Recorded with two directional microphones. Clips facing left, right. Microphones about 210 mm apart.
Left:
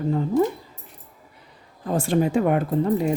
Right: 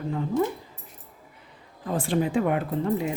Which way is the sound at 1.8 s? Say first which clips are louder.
Left 4 dB; 45° left (ahead or behind).